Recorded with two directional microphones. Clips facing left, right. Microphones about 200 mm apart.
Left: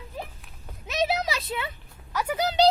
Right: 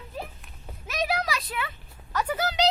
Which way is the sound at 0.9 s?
25° left (ahead or behind).